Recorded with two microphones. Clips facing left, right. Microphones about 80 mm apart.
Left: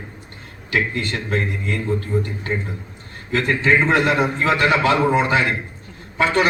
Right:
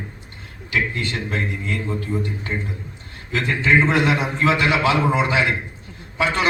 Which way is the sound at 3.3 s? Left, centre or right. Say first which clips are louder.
Left 1 dB; left.